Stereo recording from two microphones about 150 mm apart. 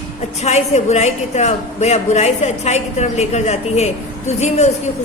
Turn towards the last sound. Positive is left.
turn(degrees=50)  # may be behind; listen again after turning